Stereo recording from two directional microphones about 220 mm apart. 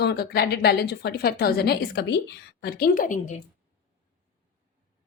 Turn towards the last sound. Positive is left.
turn(degrees=35)  # may be behind; listen again after turning